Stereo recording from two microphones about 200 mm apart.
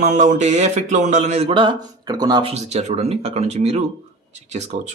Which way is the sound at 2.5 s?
35° right (ahead or behind).